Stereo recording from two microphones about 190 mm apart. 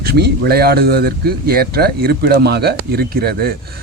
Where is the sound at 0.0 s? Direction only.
55° right (ahead or behind).